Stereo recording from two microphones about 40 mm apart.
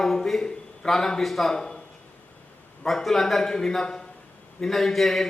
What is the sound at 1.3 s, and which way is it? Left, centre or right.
Speech, centre.